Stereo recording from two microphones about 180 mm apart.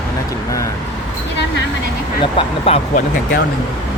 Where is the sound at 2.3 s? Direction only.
35° left (ahead or behind).